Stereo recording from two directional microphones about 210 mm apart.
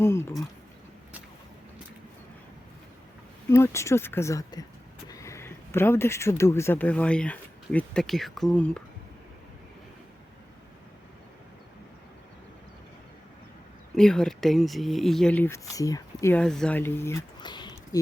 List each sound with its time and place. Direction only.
0.0 s speech: 10° left (ahead or behind)
3.5 s speech: 15° left (ahead or behind)
13.9 s speech: 5° left (ahead or behind)
17.4 s a sound: 20° left (ahead or behind)